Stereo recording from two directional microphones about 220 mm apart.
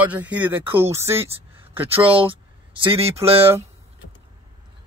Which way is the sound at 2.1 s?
25° right (ahead or behind).